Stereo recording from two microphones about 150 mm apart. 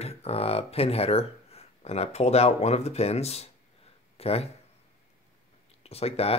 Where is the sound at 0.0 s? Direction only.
40° left (ahead or behind).